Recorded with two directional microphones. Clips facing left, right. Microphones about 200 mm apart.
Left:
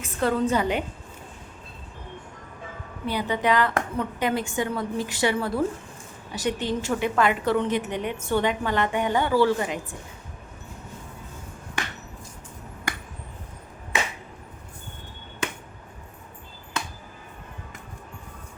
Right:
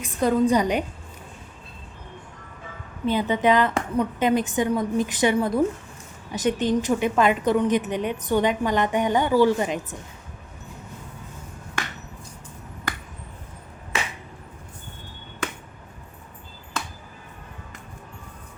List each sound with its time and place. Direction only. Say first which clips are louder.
0.0 s a woman's voice: right 3 dB; 15° right (ahead or behind)
3.1 s a woman's voice: right 4 dB; 20° right (ahead or behind)